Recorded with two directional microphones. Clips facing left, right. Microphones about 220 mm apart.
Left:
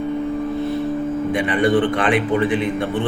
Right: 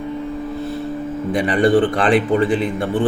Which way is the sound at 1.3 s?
35° right (ahead or behind).